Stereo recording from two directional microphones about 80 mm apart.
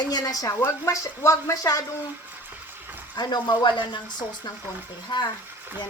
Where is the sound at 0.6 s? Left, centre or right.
Left.